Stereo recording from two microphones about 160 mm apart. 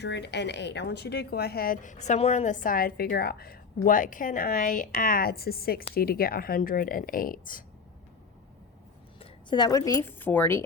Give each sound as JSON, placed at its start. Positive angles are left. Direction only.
{"t": 0.0, "sound": "a woman's voice", "side_deg": 90}
{"t": 3.8, "sound": "a woman's voice", "side_deg": 55}
{"t": 9.1, "sound": "a woman's voice", "side_deg": 30}